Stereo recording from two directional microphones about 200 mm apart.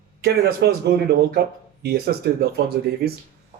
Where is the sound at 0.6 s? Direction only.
60° right (ahead or behind).